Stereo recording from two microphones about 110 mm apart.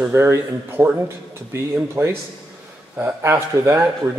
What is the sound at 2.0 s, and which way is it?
Speech, 20° right (ahead or behind).